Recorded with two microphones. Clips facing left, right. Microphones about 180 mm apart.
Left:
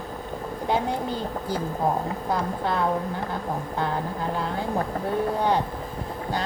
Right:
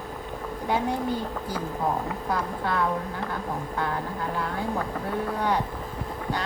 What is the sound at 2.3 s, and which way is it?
Speech, 25° left (ahead or behind).